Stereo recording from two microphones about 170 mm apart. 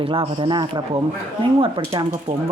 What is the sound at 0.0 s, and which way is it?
A man's voice, 30° right (ahead or behind).